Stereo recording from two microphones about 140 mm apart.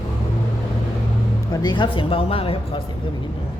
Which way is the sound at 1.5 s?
30° left (ahead or behind).